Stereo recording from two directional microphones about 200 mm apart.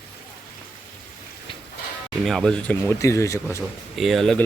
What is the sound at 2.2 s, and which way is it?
Speech, centre (ahead or behind).